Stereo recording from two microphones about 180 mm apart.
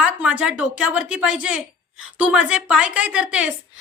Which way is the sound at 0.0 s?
5° right (ahead or behind).